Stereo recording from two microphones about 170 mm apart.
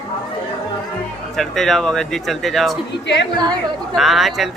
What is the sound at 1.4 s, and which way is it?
Speech, centre (ahead or behind).